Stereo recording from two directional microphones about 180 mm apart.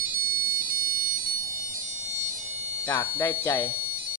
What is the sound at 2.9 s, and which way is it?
Speech, 15° left (ahead or behind).